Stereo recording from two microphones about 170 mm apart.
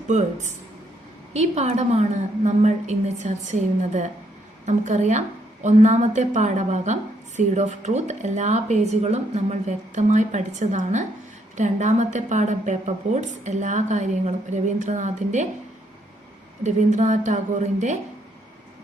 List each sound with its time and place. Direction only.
0.1 s a woman's voice: 45° right (ahead or behind)
16.6 s a woman's voice: 45° right (ahead or behind)